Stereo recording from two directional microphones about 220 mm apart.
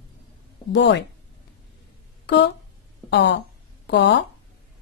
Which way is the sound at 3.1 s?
55° left (ahead or behind).